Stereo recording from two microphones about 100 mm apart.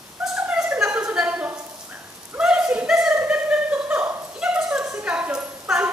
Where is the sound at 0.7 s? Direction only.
10° right (ahead or behind).